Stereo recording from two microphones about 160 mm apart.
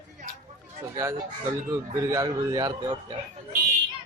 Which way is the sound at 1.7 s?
20° right (ahead or behind).